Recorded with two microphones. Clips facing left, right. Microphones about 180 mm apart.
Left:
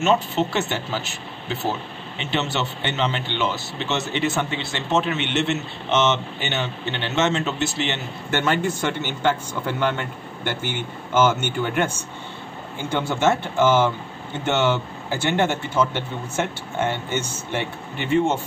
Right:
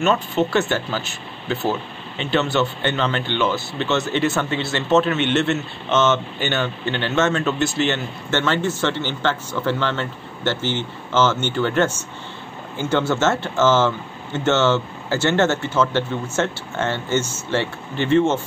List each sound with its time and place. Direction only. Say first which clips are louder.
0.0 s speech: right 1 dB; 20° left (ahead or behind)
12.9 s speech: right 2 dB; 15° left (ahead or behind)